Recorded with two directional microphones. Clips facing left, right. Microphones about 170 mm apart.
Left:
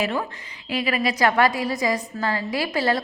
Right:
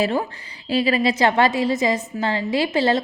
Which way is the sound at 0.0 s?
30° right (ahead or behind).